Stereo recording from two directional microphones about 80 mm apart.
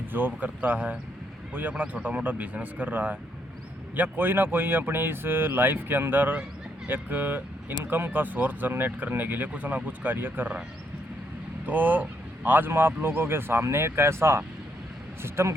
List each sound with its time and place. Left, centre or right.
0.1 s speech: right
11.6 s speech: right